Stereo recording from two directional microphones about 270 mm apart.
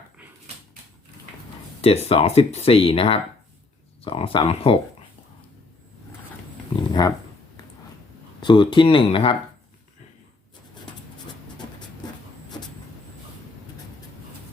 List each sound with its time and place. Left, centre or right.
1.8 s speech: left
7.0 s speech: centre
8.4 s speech: centre